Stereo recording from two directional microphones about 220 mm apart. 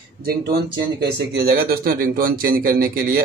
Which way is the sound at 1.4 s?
45° right (ahead or behind).